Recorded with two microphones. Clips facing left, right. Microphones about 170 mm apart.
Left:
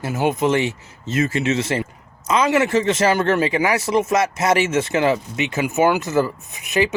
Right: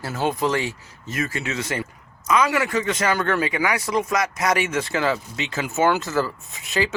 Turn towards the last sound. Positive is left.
turn(degrees=20)  # may be behind; listen again after turning